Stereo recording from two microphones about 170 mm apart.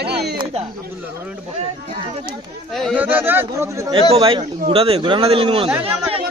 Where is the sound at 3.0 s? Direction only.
10° right (ahead or behind).